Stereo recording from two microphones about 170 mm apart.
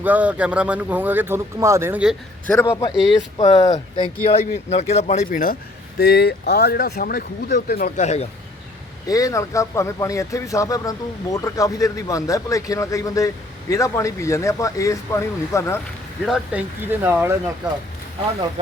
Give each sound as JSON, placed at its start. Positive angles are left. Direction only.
{"t": 0.0, "sound": "speech", "side_deg": -10}
{"t": 2.5, "sound": "a man's voice", "side_deg": 10}
{"t": 6.0, "sound": "speech", "side_deg": 70}
{"t": 7.9, "sound": "speech", "side_deg": 40}
{"t": 9.0, "sound": "speech", "side_deg": 20}
{"t": 16.2, "sound": "speech", "side_deg": -5}